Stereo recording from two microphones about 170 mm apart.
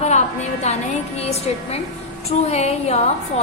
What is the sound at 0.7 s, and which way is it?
A woman's voice, 40° left (ahead or behind).